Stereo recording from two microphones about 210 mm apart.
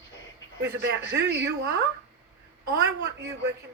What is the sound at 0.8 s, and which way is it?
Speech, 55° right (ahead or behind).